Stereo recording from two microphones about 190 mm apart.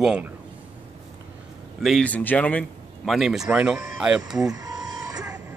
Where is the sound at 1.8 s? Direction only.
5° left (ahead or behind).